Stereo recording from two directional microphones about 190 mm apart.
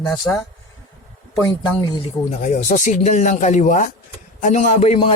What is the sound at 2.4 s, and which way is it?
A man's voice, 40° left (ahead or behind).